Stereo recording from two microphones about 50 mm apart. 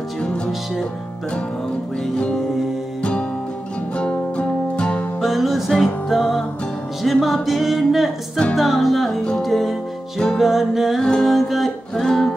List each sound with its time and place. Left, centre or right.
3.0 s music: centre
5.2 s music: centre
11.0 s music: centre
11.2 s music: centre